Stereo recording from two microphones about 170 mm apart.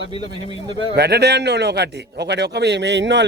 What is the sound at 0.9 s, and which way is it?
A man's voice, 75° right (ahead or behind).